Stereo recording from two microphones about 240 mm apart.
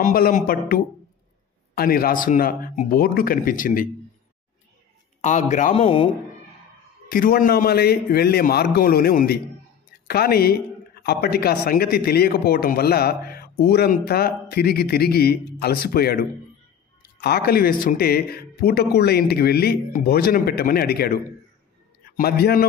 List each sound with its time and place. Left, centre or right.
0.0 s speech: left
1.8 s speech: left
5.2 s speech: left
7.1 s speech: left